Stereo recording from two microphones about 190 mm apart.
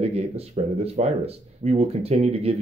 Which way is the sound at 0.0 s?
35° right (ahead or behind).